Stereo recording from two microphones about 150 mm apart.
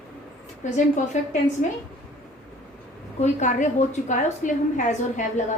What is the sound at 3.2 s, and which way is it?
A woman's voice, 55° left (ahead or behind).